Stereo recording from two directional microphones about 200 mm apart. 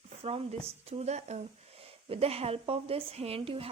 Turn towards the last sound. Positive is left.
turn(degrees=-30)  # may be behind; listen again after turning